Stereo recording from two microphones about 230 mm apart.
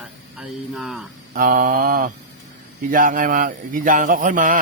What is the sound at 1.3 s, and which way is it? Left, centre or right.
A man's voice, right.